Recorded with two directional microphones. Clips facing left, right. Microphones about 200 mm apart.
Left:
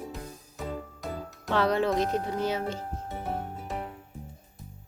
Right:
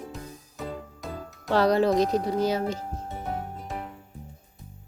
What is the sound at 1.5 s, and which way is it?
Speech, 40° right (ahead or behind).